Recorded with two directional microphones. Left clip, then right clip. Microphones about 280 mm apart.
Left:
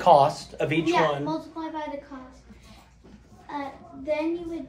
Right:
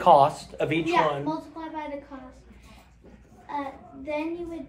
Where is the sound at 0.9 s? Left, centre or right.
Right.